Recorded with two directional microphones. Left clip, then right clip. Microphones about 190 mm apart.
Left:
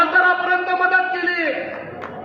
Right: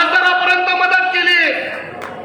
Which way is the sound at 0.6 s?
50° right (ahead or behind).